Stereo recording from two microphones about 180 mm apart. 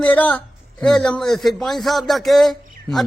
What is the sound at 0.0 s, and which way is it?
A man's voice, 10° left (ahead or behind).